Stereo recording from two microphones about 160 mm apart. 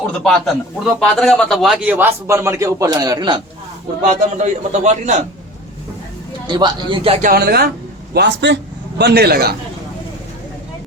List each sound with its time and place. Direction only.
0.2 s a man's voice: centre (ahead or behind); by 3.4 s 30° right (ahead or behind)
4.1 s a man's voice: 50° right (ahead or behind)
6.5 s a man's voice: 25° right (ahead or behind)
7.2 s a man's voice: 70° right (ahead or behind)